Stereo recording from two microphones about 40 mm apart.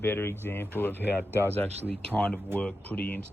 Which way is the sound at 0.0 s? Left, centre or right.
Left.